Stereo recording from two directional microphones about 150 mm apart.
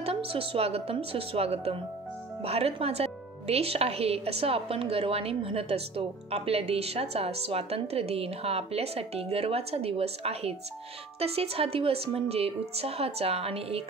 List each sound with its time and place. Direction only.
0.0 s a woman's voice: 40° right (ahead or behind)